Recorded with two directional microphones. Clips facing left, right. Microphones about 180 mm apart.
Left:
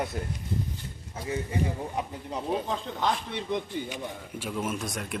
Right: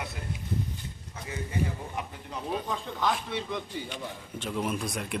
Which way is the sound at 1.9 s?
25° left (ahead or behind).